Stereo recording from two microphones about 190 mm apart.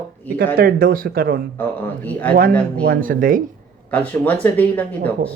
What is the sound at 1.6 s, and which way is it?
Speech, 10° left (ahead or behind).